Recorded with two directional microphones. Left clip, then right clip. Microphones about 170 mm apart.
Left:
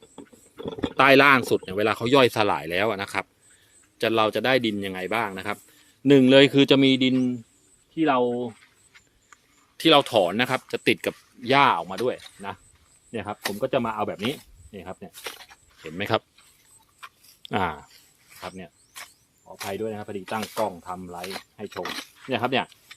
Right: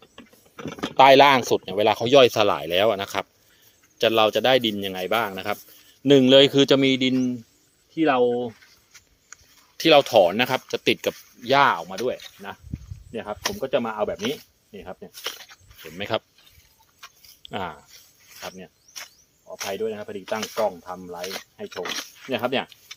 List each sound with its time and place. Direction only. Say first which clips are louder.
0.9 s speech: right 3 dB; 10° left (ahead or behind)
7.9 s speech: right 2 dB; 5° right (ahead or behind)
8.5 s a sound: right 2 dB; 50° right (ahead or behind)
9.7 s speech: right 3 dB; 10° right (ahead or behind)
11.4 s speech: right 1 dB; 25° left (ahead or behind)
13.1 s speech: right 1 dB; 65° left (ahead or behind)
15.1 s speech: right 4 dB; 5° left (ahead or behind)
15.8 s speech: left 2 dB; 45° left (ahead or behind)
17.4 s speech: left 5 dB; 45° left (ahead or behind)
18.4 s speech: even; 60° left (ahead or behind)
19.8 s speech: right 2 dB; 70° left (ahead or behind)
21.2 s speech: right 2 dB; 5° left (ahead or behind)
22.3 s speech: even; 45° left (ahead or behind)